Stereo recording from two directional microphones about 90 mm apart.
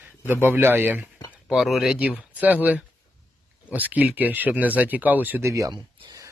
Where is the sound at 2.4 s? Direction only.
15° right (ahead or behind).